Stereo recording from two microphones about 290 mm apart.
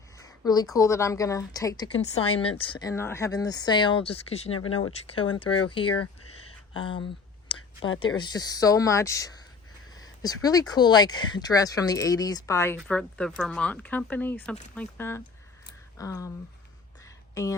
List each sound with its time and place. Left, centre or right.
0.2 s a woman's voice: centre
5.9 s a sound: left
6.7 s a woman's voice: centre
17.3 s speech: centre